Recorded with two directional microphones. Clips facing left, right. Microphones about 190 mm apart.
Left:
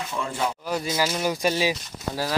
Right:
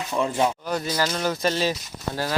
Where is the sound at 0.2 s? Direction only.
20° right (ahead or behind).